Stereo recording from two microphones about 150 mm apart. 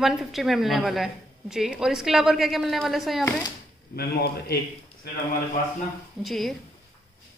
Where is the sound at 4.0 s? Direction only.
90° left.